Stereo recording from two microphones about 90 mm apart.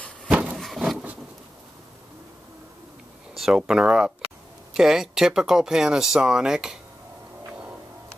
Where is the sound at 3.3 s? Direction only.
5° right (ahead or behind).